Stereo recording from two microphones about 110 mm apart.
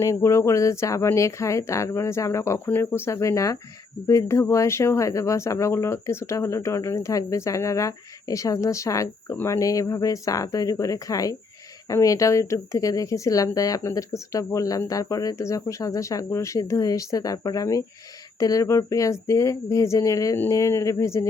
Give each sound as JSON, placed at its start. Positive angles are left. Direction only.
{"t": 0.0, "sound": "speech", "side_deg": 25}